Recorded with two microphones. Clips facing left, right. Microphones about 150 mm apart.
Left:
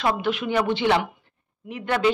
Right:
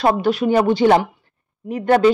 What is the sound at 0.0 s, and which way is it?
Speech, 40° right (ahead or behind).